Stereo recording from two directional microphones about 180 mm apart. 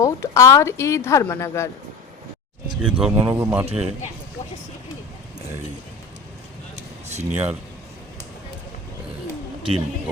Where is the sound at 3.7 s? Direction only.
35° right (ahead or behind).